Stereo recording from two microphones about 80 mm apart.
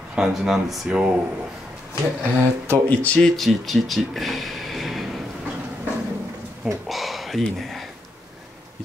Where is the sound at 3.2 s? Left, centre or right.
Centre.